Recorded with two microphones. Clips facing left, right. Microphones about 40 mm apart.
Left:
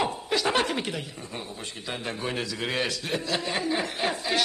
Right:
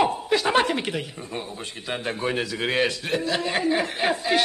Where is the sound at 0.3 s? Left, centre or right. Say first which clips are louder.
Right 1 dB; centre.